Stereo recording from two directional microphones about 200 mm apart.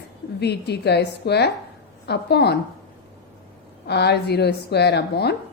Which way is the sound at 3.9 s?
55° left (ahead or behind).